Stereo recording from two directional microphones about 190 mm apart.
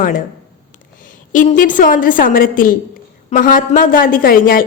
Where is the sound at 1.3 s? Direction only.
45° left (ahead or behind).